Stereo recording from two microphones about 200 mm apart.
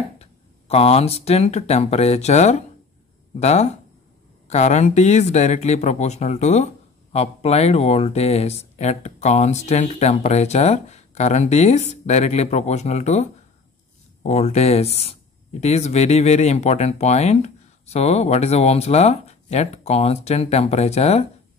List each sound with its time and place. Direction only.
0.2 s speech: 30° left (ahead or behind)